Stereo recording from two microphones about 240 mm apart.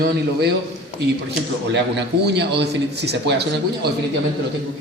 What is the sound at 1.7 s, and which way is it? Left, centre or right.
A man's voice, right.